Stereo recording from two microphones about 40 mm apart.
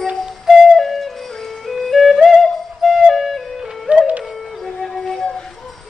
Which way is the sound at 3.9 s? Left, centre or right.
Right.